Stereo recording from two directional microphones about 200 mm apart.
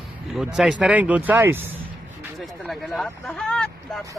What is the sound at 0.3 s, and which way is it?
Speech, centre (ahead or behind).